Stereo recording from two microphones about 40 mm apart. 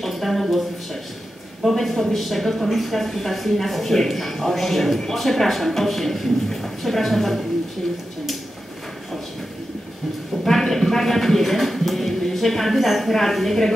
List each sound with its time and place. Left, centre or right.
0.0 s speech: centre
10.4 s speech: centre